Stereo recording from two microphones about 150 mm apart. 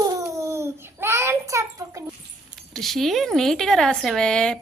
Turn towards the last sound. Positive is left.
turn(degrees=5)  # may be behind; listen again after turning